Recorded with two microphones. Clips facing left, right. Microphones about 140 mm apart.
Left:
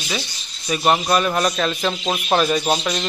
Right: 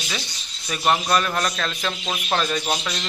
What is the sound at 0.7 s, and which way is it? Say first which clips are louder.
A man's voice: left 3 dB; 10° left (ahead or behind).